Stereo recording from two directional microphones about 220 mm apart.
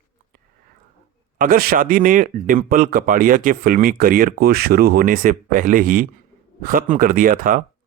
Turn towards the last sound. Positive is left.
turn(degrees=-40)  # may be behind; listen again after turning